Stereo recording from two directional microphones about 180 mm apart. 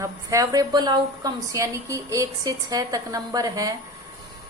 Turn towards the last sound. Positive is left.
turn(degrees=-20)  # may be behind; listen again after turning